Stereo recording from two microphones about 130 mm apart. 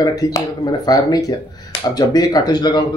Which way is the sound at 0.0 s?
30° left (ahead or behind).